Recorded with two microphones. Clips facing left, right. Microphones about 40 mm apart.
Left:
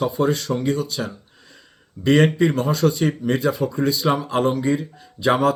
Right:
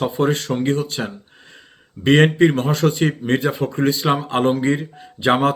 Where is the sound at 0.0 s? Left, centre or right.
Right.